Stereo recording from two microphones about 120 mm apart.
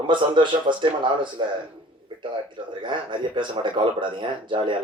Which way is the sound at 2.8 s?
40° right (ahead or behind).